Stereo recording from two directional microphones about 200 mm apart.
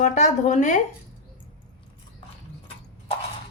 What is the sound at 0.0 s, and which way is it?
Speech, 35° left (ahead or behind).